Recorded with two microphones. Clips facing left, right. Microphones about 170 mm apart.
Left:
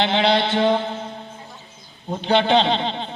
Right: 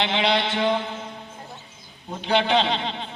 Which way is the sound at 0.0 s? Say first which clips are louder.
Left 4 dB; 35° left (ahead or behind).